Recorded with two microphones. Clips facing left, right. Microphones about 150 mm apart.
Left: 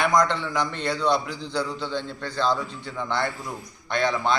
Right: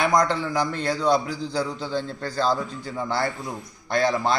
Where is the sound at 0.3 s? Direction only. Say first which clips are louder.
Right 2 dB; 40° right (ahead or behind).